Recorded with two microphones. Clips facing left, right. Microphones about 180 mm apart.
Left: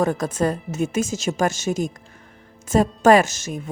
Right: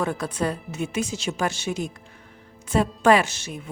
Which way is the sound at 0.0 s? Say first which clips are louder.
Left 5 dB; 45° left (ahead or behind).